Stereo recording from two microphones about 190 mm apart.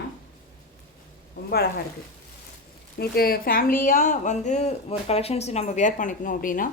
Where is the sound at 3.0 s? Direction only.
55° left (ahead or behind).